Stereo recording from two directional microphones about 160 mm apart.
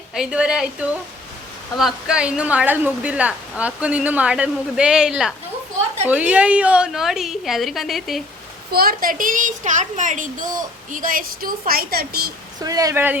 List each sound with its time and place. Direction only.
0.1 s a woman's voice: 5° right (ahead or behind)
8.7 s a woman's voice: 70° right (ahead or behind)
12.6 s speech: 20° right (ahead or behind)